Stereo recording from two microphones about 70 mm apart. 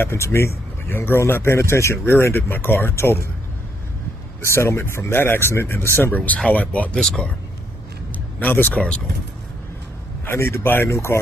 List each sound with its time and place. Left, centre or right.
0.0 s speech: left
4.4 s speech: left
7.0 s speech: centre
8.4 s speech: left
10.2 s speech: left